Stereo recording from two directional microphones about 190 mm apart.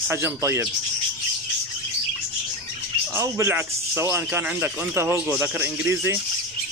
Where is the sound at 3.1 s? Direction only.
15° right (ahead or behind).